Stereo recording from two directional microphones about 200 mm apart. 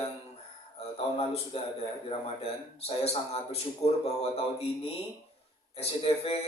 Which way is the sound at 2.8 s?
30° left (ahead or behind).